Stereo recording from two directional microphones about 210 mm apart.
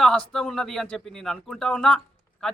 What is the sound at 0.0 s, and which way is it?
A man's voice, 5° left (ahead or behind).